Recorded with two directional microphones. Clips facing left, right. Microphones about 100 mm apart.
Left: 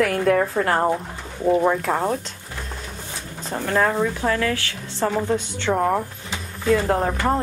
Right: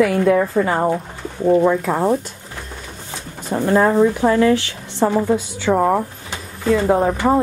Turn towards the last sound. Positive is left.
turn(degrees=-5)  # may be behind; listen again after turning